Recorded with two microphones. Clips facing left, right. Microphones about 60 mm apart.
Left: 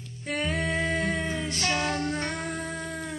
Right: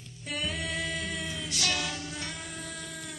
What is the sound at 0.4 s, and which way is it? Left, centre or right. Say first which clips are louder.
Music: left 6 dB; left.